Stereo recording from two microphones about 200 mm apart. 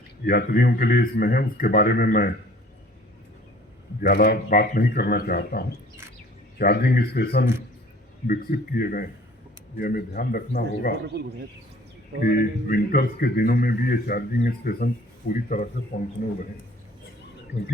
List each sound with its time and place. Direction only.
0.3 s a man's voice: 50° left (ahead or behind)
4.0 s a man's voice: 50° left (ahead or behind)
12.2 s a man's voice: 45° left (ahead or behind)